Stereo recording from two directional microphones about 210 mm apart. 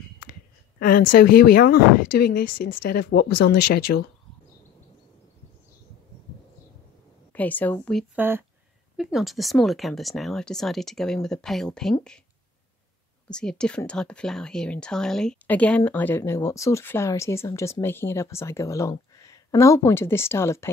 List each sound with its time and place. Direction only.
0.2 s a sound: 40° left (ahead or behind)
1.1 s speech: 45° left (ahead or behind)
7.3 s speech: 10° left (ahead or behind)
8.2 s speech: 10° right (ahead or behind)
13.3 s speech: 5° left (ahead or behind)